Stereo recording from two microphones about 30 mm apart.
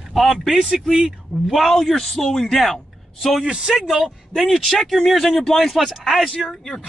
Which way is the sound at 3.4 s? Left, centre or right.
Right.